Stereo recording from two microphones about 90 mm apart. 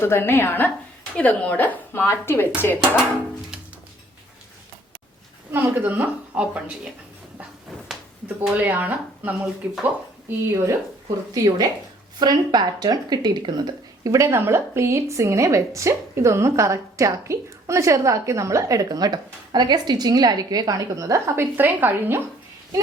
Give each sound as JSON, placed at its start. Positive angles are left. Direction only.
{"t": 0.0, "sound": "a woman's voice", "side_deg": 25}
{"t": 5.5, "sound": "a woman's voice", "side_deg": -20}
{"t": 8.4, "sound": "speech", "side_deg": -20}
{"t": 12.2, "sound": "speech", "side_deg": -50}
{"t": 14.1, "sound": "a woman's voice", "side_deg": -30}